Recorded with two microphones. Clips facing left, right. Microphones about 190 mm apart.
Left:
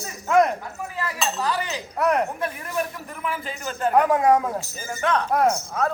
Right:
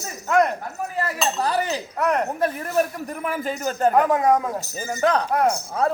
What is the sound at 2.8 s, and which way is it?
A man's voice, 40° right (ahead or behind).